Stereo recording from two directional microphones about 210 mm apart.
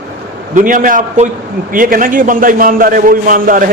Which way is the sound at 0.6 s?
40° right (ahead or behind).